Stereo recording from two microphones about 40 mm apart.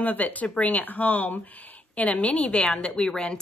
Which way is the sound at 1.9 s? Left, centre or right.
Left.